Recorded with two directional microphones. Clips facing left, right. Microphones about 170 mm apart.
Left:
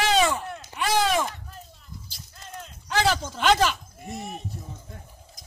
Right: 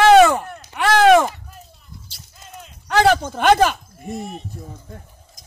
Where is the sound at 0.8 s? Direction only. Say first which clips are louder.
Right 11 dB; 75° right (ahead or behind).